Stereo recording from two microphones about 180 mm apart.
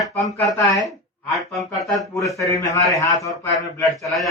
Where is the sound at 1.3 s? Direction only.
Centre (ahead or behind).